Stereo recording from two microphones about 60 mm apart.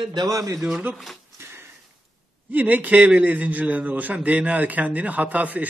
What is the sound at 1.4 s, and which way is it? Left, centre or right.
Sniff, right.